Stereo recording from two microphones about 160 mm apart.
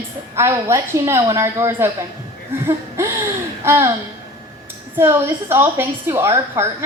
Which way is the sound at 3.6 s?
15° right (ahead or behind).